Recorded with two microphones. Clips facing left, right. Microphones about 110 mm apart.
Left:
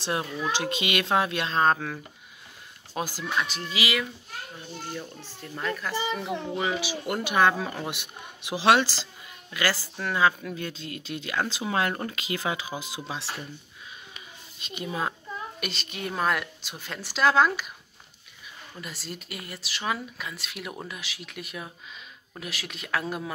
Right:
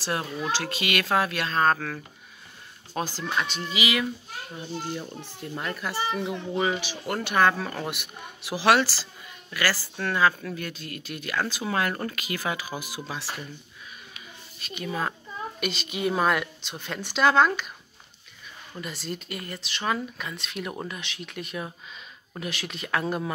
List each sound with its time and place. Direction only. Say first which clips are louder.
0.0 s speech: even; 20° left (ahead or behind); by 4.0 s centre (ahead or behind)
4.6 s a child's voice: right 5 dB; 15° right (ahead or behind)
6.5 s speech: right 3 dB; centre (ahead or behind)
6.9 s speech: even; 10° left (ahead or behind)
14.9 s speech: right 1 dB; 15° left (ahead or behind)
15.6 s speech: right 10 dB; centre (ahead or behind)
18.8 s speech: right 5 dB; centre (ahead or behind)